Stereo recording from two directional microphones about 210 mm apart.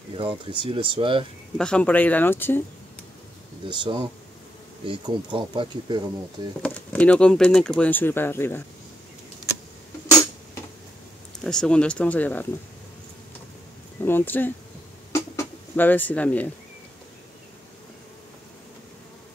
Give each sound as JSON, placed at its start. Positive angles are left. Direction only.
{"t": 0.1, "sound": "speech", "side_deg": -25}
{"t": 1.6, "sound": "speech", "side_deg": 5}
{"t": 3.6, "sound": "speech", "side_deg": -20}
{"t": 6.6, "sound": "speech", "side_deg": 5}
{"t": 11.4, "sound": "speech", "side_deg": 5}
{"t": 14.0, "sound": "speech", "side_deg": 10}